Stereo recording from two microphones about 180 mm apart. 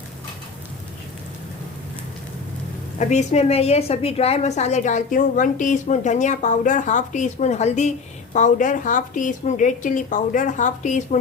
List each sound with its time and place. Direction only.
3.0 s a woman's voice: 40° left (ahead or behind)